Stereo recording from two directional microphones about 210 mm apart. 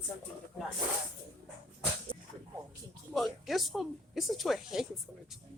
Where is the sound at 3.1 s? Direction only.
Centre (ahead or behind).